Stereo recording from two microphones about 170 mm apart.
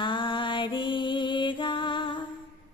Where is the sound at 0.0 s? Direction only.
30° left (ahead or behind).